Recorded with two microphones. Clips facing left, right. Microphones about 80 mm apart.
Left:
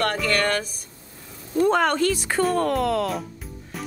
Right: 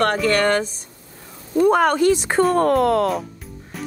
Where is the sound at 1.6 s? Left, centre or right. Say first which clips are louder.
Right 4 dB; centre.